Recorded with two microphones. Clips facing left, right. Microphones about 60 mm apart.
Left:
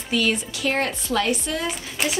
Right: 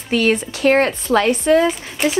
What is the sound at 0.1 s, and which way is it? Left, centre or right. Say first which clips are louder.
A woman's voice: right 6 dB; right.